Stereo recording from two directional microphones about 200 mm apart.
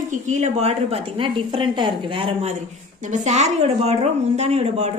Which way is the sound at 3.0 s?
40° right (ahead or behind).